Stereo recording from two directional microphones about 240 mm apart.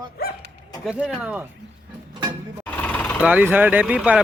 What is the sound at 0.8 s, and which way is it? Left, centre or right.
Speech, centre.